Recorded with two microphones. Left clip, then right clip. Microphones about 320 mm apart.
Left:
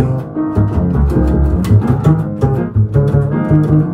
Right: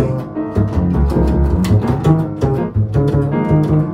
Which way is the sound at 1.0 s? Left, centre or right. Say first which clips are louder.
Left 1 dB; centre.